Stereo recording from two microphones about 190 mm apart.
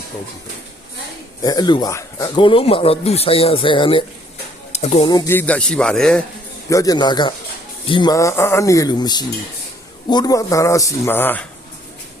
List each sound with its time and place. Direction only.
1.4 s speech: 20° left (ahead or behind)
5.1 s speech: 15° left (ahead or behind)
6.7 s speech: 20° left (ahead or behind)